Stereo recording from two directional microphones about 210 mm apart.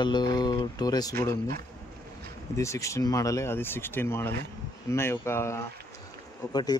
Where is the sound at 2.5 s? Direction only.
15° left (ahead or behind).